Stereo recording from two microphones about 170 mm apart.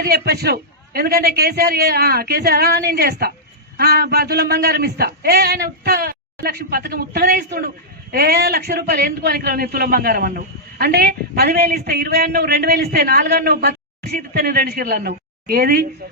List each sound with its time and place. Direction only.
0.0 s a man's voice: 65° right (ahead or behind)